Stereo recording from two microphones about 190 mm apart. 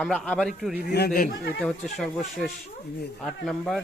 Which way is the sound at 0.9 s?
55° left (ahead or behind).